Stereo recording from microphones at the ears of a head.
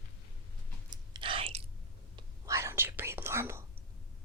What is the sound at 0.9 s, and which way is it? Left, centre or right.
Chewing, right.